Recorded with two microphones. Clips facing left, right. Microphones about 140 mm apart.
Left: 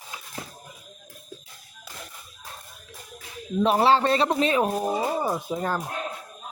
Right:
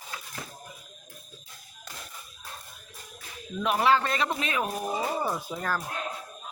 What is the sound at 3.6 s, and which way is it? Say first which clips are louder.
Speech: left 4 dB; 30° left (ahead or behind).